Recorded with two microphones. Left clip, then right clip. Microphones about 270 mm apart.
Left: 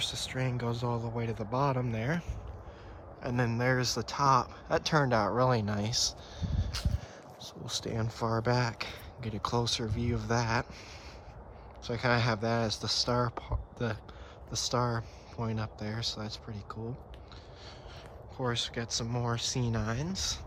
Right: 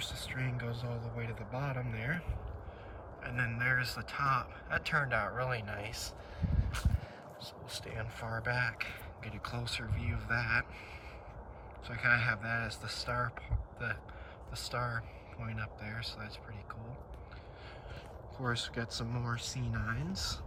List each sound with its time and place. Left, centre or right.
0.0 s speech: centre
6.0 s a sound: left
8.4 s speech: centre
11.9 s speech: centre
18.3 s speech: centre